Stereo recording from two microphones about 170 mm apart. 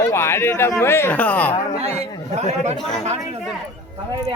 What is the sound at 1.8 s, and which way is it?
Speech, 35° right (ahead or behind).